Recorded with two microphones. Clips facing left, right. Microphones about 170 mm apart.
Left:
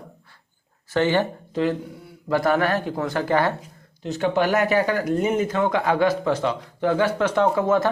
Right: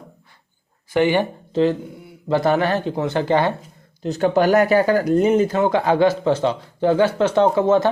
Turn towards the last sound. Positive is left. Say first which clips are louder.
# right 4 dB
turn(degrees=-25)  # may be behind; listen again after turning